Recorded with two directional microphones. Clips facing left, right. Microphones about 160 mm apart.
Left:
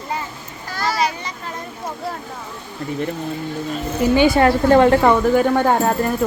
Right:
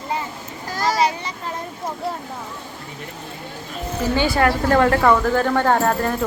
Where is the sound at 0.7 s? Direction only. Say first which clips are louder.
Right 1 dB; 40° right (ahead or behind).